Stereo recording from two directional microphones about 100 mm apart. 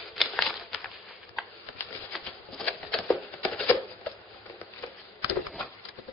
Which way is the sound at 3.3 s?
20° left (ahead or behind).